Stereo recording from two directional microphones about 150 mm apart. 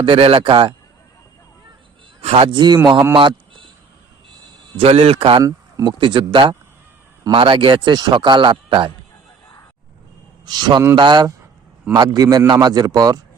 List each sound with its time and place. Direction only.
0.0 s a man's voice: 35° right (ahead or behind)
2.2 s a man's voice: 40° right (ahead or behind); by 3.1 s 25° right (ahead or behind)
3.2 s a sound: 35° right (ahead or behind)
4.8 s a man's voice: 40° right (ahead or behind)
5.4 s a man's voice: 25° right (ahead or behind)
10.4 s a man's voice: 30° right (ahead or behind)